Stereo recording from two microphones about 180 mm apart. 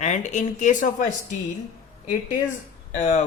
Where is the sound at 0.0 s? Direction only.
40° left (ahead or behind).